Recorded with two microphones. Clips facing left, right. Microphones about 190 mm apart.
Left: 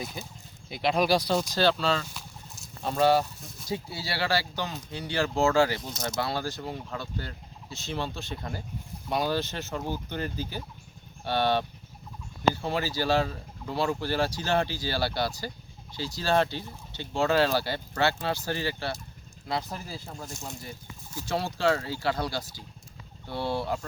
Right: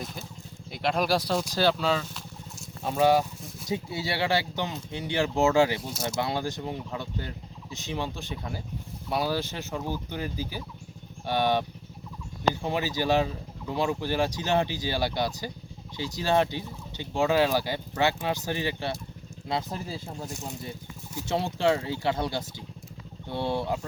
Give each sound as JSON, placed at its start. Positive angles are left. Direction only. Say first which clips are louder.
{"t": 0.0, "sound": "speech", "louder": "even", "side_deg": 0}
{"t": 6.0, "sound": "speech", "louder": "right 1 dB", "side_deg": -20}
{"t": 12.6, "sound": "speech", "louder": "right 1 dB", "side_deg": -20}